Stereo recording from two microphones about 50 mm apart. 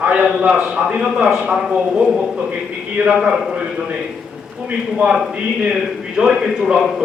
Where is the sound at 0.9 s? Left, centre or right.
Centre.